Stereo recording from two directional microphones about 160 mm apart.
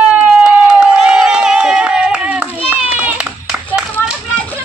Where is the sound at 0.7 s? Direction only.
5° right (ahead or behind).